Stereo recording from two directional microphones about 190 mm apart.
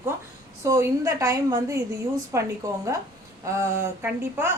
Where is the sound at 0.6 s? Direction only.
15° right (ahead or behind).